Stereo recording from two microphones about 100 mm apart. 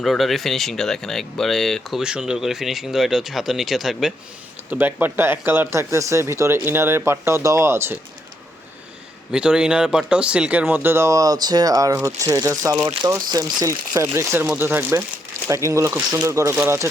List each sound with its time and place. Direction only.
0.0 s speech: centre (ahead or behind)
4.7 s speech: 20° right (ahead or behind)
9.3 s speech: 10° right (ahead or behind)
10.8 s speech: 25° right (ahead or behind)
15.4 s speech: 30° right (ahead or behind)